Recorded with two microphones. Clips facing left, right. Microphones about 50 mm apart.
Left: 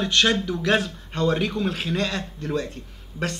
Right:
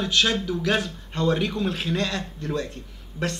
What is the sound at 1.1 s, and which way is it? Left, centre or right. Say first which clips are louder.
Speech: left 1 dB; centre.